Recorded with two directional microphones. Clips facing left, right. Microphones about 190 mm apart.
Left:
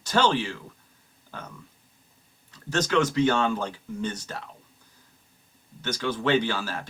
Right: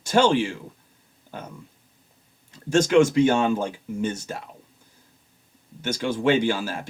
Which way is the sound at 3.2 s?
10° right (ahead or behind).